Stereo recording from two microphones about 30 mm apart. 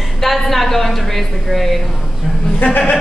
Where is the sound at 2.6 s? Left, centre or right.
Left.